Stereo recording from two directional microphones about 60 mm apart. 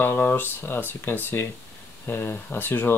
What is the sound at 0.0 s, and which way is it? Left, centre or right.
Speech, left.